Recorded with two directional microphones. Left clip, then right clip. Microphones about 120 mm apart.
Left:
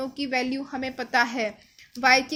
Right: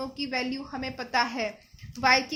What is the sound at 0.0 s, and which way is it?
A woman's voice, 35° left (ahead or behind).